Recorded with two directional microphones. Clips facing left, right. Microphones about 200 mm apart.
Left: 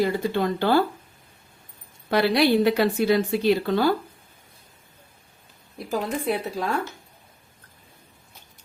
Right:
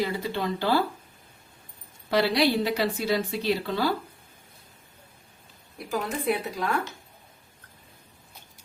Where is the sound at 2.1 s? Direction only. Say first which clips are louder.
Left 3 dB; 55° left (ahead or behind).